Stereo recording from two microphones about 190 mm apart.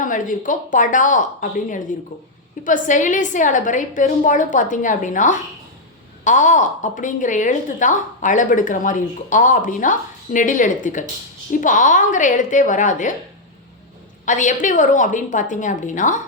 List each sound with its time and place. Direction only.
0.0 s a woman's voice: 45° left (ahead or behind)
14.3 s a woman's voice: 40° left (ahead or behind)